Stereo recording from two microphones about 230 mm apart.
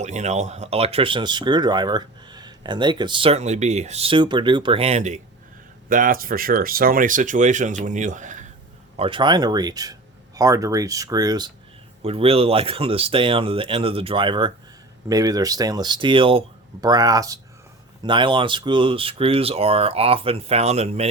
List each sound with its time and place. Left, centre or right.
0.0 s speech: right
9.0 s speech: right